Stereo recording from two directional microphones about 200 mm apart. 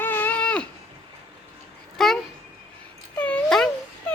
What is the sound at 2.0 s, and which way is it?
Speech, centre (ahead or behind).